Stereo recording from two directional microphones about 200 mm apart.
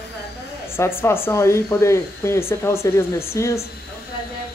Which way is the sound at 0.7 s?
10° left (ahead or behind).